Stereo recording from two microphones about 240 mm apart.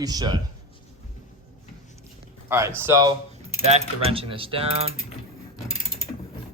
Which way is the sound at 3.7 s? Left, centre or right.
Right.